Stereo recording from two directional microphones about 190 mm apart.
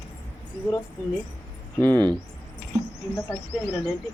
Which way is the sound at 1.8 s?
10° left (ahead or behind).